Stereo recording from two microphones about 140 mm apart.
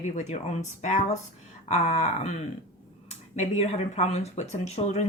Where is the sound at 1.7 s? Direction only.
55° left (ahead or behind).